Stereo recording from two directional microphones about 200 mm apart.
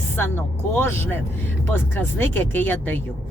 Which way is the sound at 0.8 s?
10° left (ahead or behind).